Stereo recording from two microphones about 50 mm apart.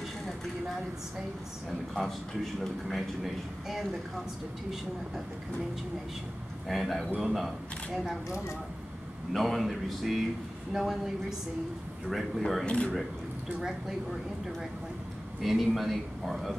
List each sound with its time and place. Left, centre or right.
2.0 s a man's voice: centre
6.7 s a man's voice: centre
9.3 s a man's voice: centre
15.4 s a man's voice: centre